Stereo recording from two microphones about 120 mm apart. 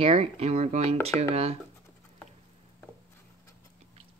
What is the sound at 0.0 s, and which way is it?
Speech, 50° right (ahead or behind).